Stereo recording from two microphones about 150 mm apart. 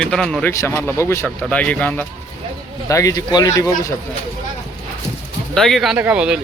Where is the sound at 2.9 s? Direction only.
20° left (ahead or behind).